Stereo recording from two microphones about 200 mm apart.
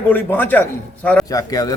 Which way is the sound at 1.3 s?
20° left (ahead or behind).